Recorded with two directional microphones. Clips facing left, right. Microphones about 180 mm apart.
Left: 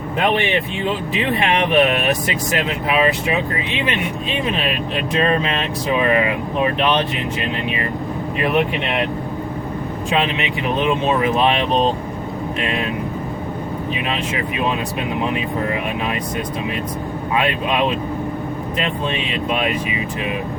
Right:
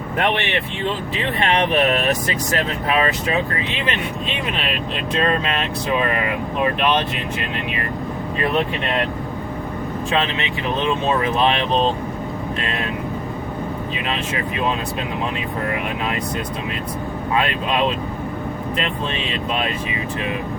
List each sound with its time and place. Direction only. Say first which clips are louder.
1.1 s speech: left 1 dB; 15° left (ahead or behind)
5.2 s speech: left 1 dB; 20° left (ahead or behind)
10.1 s speech: left 2 dB; 15° left (ahead or behind)
12.5 s speech: left 5 dB; 20° left (ahead or behind)
14.1 s speech: left 1 dB; 20° left (ahead or behind)
17.3 s speech: left 1 dB; 15° left (ahead or behind)